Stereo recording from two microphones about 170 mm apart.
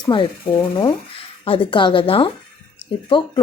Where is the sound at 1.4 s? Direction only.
30° left (ahead or behind).